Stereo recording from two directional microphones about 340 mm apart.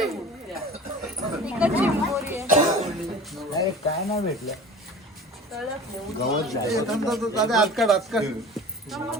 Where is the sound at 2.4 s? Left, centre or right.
Right.